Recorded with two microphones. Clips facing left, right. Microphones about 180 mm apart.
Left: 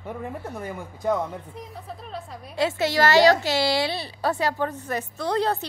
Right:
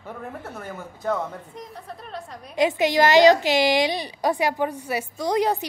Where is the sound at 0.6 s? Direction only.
15° left (ahead or behind).